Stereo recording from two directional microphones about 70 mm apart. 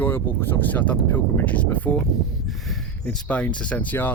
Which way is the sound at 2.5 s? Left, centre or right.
Centre.